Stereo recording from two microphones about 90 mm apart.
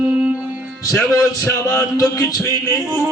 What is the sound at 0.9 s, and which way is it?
A man's voice, 35° left (ahead or behind).